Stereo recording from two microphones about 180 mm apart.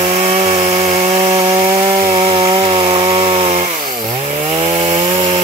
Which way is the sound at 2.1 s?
30° right (ahead or behind).